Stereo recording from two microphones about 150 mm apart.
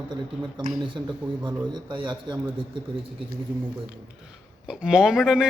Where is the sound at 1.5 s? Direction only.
30° right (ahead or behind).